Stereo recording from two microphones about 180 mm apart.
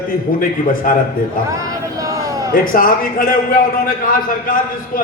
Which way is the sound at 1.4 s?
20° right (ahead or behind).